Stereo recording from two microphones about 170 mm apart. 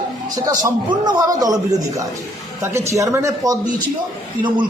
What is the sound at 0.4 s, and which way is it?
A man's voice, 20° right (ahead or behind).